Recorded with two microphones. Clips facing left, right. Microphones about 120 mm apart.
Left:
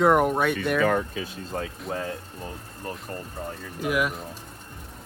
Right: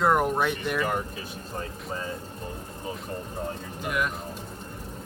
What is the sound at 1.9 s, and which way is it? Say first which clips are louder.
Speech: left 3 dB; 70° left (ahead or behind).